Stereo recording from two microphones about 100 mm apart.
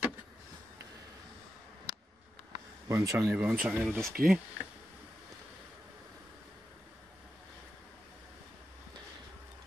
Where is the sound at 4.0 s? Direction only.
Centre (ahead or behind).